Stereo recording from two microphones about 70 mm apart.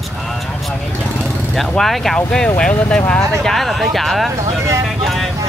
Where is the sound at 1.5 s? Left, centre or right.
Centre.